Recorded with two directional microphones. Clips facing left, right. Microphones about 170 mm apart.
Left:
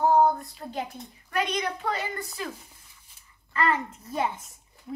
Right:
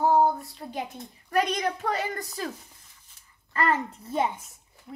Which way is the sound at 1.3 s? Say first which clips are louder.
Right 3 dB; 40° right (ahead or behind).